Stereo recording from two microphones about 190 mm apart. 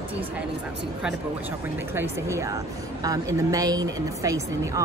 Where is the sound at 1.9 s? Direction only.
15° right (ahead or behind).